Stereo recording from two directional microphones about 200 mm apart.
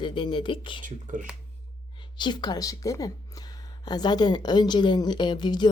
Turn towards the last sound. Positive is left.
turn(degrees=20)  # may be behind; listen again after turning